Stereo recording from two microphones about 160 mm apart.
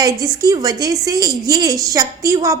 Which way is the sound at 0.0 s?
25° right (ahead or behind).